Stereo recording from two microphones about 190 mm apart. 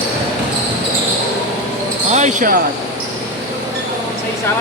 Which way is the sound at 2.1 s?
35° right (ahead or behind).